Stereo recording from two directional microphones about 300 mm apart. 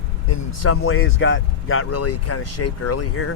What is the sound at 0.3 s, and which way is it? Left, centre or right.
Speech, left.